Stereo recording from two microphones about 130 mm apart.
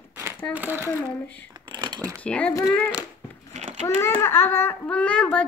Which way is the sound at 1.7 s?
30° right (ahead or behind).